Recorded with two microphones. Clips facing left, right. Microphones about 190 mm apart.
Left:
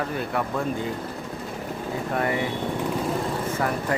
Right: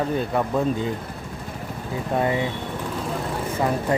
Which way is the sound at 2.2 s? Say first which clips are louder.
Right 3 dB; 20° right (ahead or behind).